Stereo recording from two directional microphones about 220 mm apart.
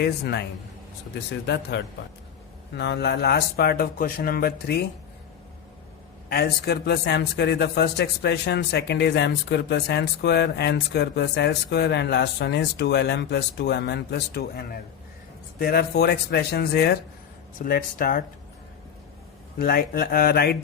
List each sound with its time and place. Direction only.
0.0 s a man's voice: 50° left (ahead or behind)
1.7 s a man's voice: 50° left (ahead or behind)
6.2 s a man's voice: 45° left (ahead or behind)
19.5 s a man's voice: 45° left (ahead or behind)